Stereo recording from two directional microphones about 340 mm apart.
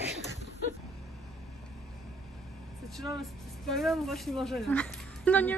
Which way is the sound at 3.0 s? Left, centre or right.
Centre.